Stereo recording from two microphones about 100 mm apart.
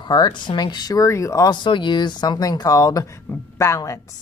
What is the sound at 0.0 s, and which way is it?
A woman's voice, 45° left (ahead or behind).